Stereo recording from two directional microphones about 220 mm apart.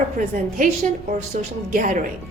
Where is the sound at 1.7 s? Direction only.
35° right (ahead or behind).